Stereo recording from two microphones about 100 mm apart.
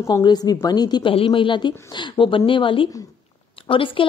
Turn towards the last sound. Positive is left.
turn(degrees=60)  # may be behind; listen again after turning